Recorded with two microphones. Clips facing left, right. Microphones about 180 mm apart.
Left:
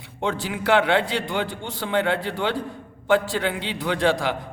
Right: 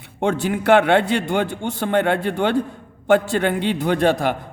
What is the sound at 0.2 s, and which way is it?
A man's voice, 50° right (ahead or behind).